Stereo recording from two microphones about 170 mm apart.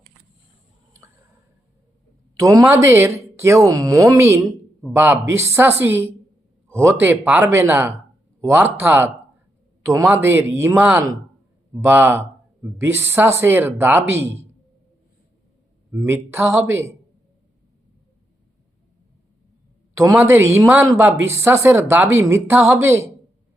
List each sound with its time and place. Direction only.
2.4 s a woman's voice: 20° right (ahead or behind)
16.0 s a woman's voice: 15° right (ahead or behind)
19.9 s a woman's voice: 15° right (ahead or behind)